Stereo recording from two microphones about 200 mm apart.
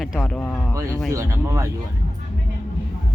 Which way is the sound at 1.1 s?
15° right (ahead or behind).